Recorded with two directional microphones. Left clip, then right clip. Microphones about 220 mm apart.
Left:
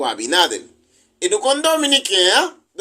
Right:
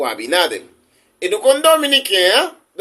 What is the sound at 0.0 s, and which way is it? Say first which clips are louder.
Speech: even; 25° left (ahead or behind).